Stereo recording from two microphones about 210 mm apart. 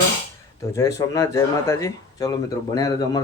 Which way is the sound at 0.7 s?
15° left (ahead or behind).